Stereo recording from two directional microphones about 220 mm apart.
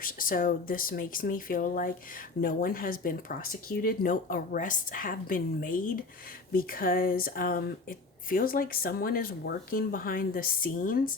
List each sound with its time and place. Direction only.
0.0 s speech: 40° left (ahead or behind)